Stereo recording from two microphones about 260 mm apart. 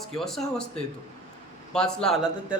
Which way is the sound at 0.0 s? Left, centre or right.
Centre.